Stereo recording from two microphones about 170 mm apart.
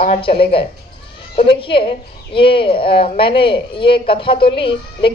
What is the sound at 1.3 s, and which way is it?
A woman's voice, 30° left (ahead or behind).